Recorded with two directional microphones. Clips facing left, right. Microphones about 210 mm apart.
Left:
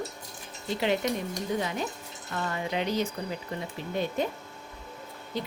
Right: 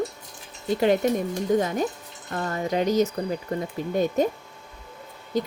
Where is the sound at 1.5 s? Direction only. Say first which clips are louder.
Right 8 dB; 45° right (ahead or behind).